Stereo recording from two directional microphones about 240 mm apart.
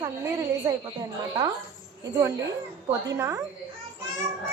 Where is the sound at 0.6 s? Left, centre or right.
Centre.